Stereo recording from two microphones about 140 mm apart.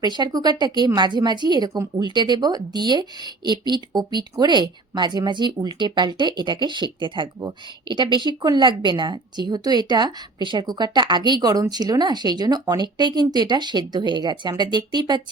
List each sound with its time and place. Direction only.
0.0 s speech: 30° right (ahead or behind)